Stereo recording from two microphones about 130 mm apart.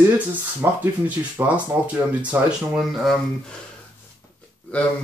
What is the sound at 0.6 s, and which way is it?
Speech, 20° right (ahead or behind).